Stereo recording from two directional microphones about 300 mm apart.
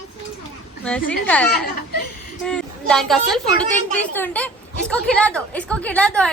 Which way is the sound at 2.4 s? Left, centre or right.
Centre.